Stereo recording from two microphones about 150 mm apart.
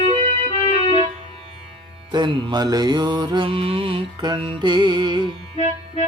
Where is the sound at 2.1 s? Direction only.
30° right (ahead or behind).